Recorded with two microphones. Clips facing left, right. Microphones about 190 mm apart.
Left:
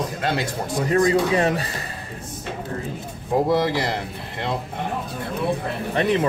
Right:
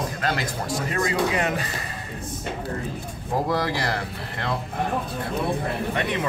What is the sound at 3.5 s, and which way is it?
Speech, 20° left (ahead or behind).